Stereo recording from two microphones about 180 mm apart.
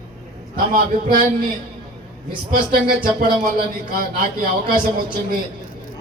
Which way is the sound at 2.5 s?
55° right (ahead or behind).